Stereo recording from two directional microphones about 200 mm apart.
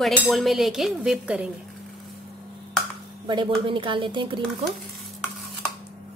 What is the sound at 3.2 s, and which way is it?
Speech, 25° right (ahead or behind).